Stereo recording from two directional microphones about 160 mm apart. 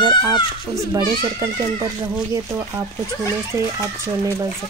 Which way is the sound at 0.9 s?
20° right (ahead or behind).